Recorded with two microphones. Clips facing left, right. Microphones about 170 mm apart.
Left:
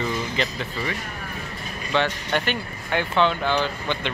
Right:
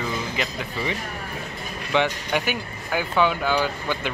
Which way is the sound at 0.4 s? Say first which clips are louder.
Left 1 dB; 10° right (ahead or behind).